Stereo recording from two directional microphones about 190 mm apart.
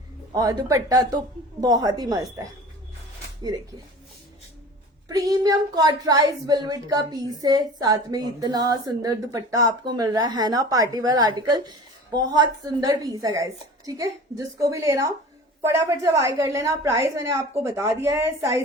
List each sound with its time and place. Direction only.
0.3 s speech: 20° right (ahead or behind)
5.0 s a woman's voice: 20° right (ahead or behind)